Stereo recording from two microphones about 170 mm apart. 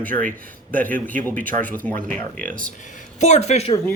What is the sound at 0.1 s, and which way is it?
Speech, 55° right (ahead or behind).